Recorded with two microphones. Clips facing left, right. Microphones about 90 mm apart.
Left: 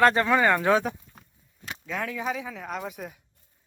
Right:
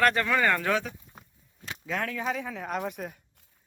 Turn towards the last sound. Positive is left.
turn(degrees=0)  # may be behind; listen again after turning